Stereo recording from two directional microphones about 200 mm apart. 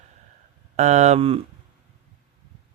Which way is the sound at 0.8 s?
35° right (ahead or behind).